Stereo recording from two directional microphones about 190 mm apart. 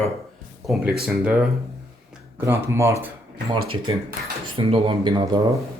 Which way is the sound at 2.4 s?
15° right (ahead or behind).